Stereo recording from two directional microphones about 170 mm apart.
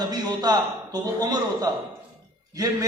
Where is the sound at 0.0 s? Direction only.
25° right (ahead or behind).